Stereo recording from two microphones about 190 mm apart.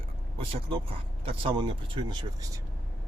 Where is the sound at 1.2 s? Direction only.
30° right (ahead or behind).